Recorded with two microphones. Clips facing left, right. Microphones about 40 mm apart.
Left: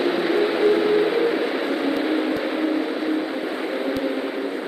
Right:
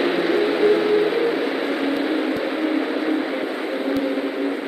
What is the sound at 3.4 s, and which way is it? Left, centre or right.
Vehicle, centre.